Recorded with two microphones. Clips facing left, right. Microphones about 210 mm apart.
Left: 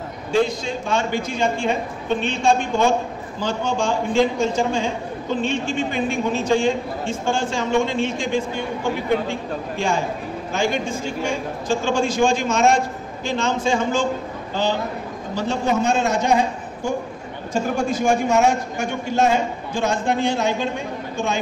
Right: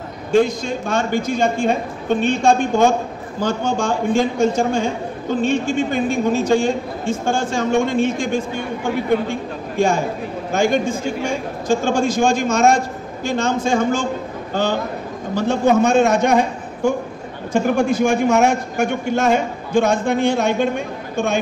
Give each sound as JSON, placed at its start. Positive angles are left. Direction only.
{"t": 0.3, "sound": "a man's voice", "side_deg": -45}
{"t": 17.5, "sound": "a man's voice", "side_deg": -60}